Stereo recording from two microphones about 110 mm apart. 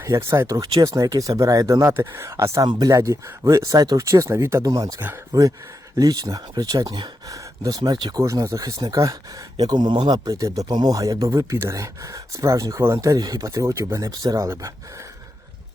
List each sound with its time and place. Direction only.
0.0 s speech: 25° right (ahead or behind)
2.6 s speech: 40° right (ahead or behind)
4.9 s speech: 20° right (ahead or behind)
5.3 s speech: 30° right (ahead or behind)
7.3 s a sound: 30° right (ahead or behind)
7.9 s speech: 40° right (ahead or behind)
8.2 s speech: 30° right (ahead or behind)